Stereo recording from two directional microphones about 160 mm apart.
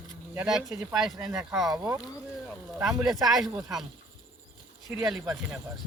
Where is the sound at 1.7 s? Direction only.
20° right (ahead or behind).